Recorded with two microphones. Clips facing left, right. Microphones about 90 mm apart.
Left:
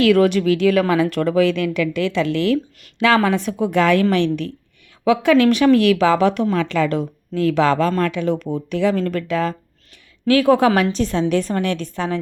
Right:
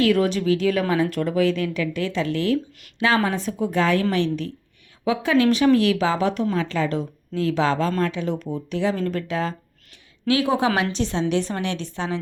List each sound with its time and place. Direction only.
0.0 s a woman's voice: 80° left; by 12.2 s 50° left (ahead or behind)